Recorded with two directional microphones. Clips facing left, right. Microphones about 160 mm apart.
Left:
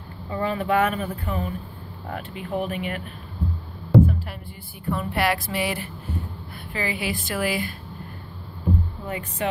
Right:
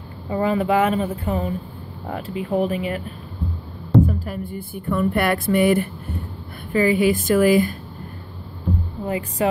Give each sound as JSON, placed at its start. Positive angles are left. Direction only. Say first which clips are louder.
{"t": 0.3, "sound": "speech", "louder": "right 4 dB", "side_deg": -25}
{"t": 4.0, "sound": "speech", "louder": "right 1 dB", "side_deg": -40}
{"t": 9.0, "sound": "speech", "louder": "right 6 dB", "side_deg": -30}